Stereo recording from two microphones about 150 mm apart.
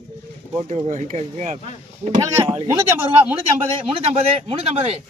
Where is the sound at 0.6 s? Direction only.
50° right (ahead or behind).